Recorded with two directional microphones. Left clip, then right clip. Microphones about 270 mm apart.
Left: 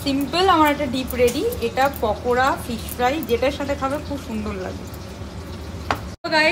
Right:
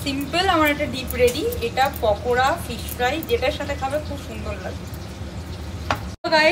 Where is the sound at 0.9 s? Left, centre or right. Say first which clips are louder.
Even; left.